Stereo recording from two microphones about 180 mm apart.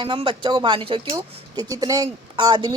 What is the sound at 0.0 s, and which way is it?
A woman's voice, 25° right (ahead or behind).